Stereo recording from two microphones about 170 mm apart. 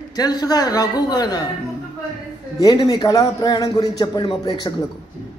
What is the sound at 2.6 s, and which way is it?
A man's voice, 20° left (ahead or behind).